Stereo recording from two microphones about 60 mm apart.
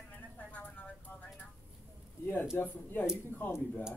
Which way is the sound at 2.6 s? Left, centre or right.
Left.